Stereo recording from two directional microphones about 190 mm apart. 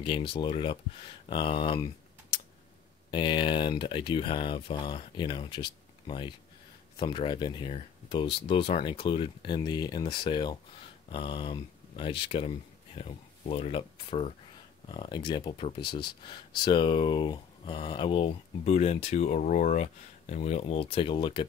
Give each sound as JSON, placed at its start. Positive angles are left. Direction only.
{"t": 0.0, "sound": "speech", "side_deg": 25}
{"t": 3.1, "sound": "speech", "side_deg": 25}